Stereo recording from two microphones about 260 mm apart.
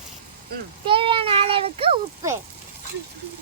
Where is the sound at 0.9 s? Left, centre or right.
Centre.